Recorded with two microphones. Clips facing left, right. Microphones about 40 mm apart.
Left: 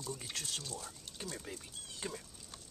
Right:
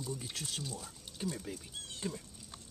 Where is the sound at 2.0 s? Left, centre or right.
Centre.